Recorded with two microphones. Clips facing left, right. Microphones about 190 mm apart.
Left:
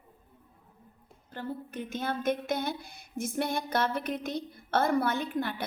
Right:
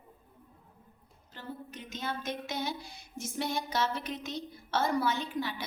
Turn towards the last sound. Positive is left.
turn(degrees=55)  # may be behind; listen again after turning